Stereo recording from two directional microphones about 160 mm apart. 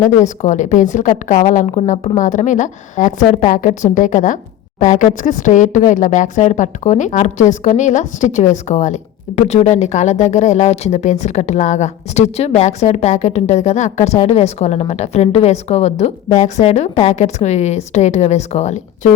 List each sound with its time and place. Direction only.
0.2 s a woman's voice: 50° left (ahead or behind)